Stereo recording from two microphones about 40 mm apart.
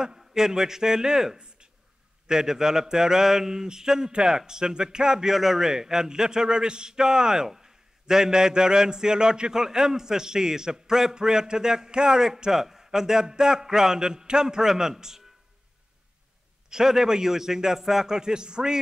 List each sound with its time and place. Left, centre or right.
0.3 s mantra: centre
16.7 s mantra: centre